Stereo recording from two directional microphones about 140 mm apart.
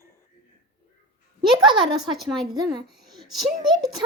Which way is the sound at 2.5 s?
30° right (ahead or behind).